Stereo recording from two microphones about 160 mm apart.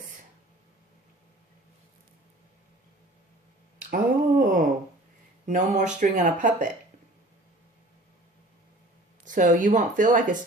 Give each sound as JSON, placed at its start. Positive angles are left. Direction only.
{"t": 3.8, "sound": "a sound", "side_deg": -60}
{"t": 5.5, "sound": "speech", "side_deg": -50}
{"t": 9.2, "sound": "speech", "side_deg": -55}